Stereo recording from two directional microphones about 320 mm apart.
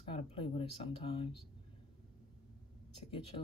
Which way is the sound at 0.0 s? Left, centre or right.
Centre.